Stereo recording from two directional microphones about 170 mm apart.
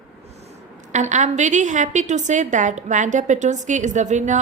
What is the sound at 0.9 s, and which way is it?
A woman's voice, 45° right (ahead or behind).